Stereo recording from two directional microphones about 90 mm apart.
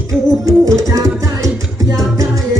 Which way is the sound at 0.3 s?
40° right (ahead or behind).